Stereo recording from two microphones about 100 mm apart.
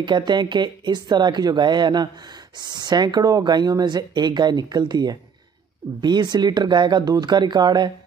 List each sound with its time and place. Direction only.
0.0 s speech: 50° right (ahead or behind)